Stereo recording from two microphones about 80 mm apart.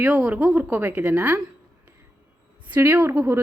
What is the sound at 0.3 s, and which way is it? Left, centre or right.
Speech, centre.